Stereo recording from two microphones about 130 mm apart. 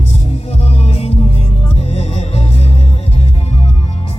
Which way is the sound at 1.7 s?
55° left (ahead or behind).